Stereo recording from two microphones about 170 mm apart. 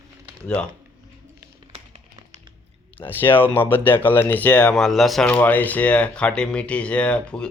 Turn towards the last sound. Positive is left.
turn(degrees=5)  # may be behind; listen again after turning